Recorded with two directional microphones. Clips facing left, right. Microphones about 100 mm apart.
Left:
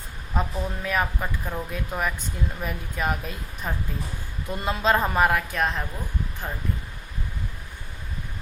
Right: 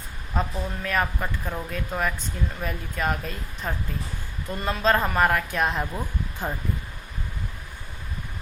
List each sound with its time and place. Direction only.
0.3 s speech: 5° left (ahead or behind)
4.4 s speech: 15° left (ahead or behind); by 5.8 s 5° right (ahead or behind)
6.4 s speech: 20° right (ahead or behind)